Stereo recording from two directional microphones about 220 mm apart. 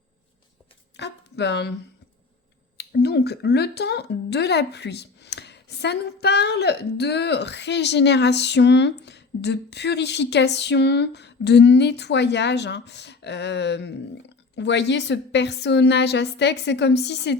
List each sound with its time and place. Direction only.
0.9 s speech: 50° left (ahead or behind)
2.7 s speech: 45° left (ahead or behind)